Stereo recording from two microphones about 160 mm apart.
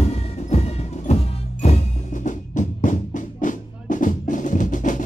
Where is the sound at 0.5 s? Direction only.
45° left (ahead or behind).